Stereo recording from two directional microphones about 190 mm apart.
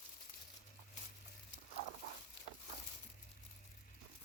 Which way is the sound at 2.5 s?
70° left (ahead or behind).